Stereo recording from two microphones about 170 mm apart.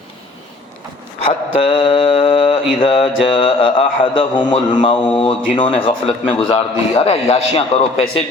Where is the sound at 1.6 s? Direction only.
35° left (ahead or behind).